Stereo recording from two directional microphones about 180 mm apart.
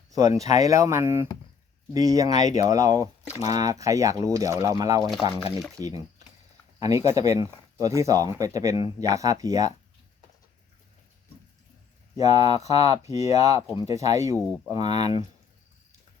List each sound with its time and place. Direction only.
0.1 s speech: 20° right (ahead or behind)
12.1 s speech: 20° right (ahead or behind)
14.3 s speech: centre (ahead or behind)
14.8 s speech: 20° right (ahead or behind)